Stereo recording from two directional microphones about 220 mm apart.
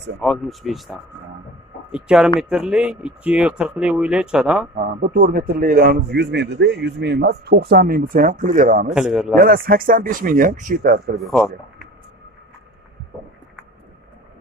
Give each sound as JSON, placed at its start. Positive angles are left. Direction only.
{"t": 0.2, "sound": "speech", "side_deg": 0}
{"t": 5.1, "sound": "speech", "side_deg": -40}
{"t": 8.8, "sound": "speech", "side_deg": -5}
{"t": 9.4, "sound": "speech", "side_deg": -40}
{"t": 11.1, "sound": "speech", "side_deg": 0}